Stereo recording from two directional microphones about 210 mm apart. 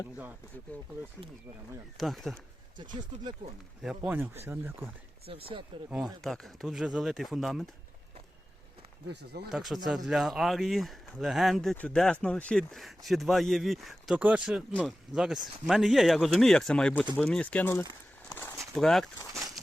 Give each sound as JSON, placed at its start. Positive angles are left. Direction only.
{"t": 0.7, "sound": "speech", "side_deg": 5}
{"t": 2.0, "sound": "speech", "side_deg": 0}
{"t": 3.8, "sound": "speech", "side_deg": -5}
{"t": 5.2, "sound": "speech", "side_deg": -25}
{"t": 6.2, "sound": "speech", "side_deg": 0}
{"t": 9.0, "sound": "speech", "side_deg": -50}
{"t": 9.5, "sound": "speech", "side_deg": 0}
{"t": 18.3, "sound": "a sound", "side_deg": 10}
{"t": 18.6, "sound": "speech", "side_deg": 0}